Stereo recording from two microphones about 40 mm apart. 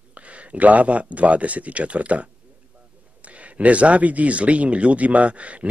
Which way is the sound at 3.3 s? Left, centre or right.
Right.